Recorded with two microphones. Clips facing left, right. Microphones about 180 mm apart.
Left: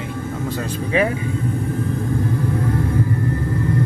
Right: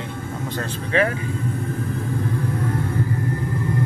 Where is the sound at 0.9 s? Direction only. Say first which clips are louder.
Left 1 dB; 15° left (ahead or behind).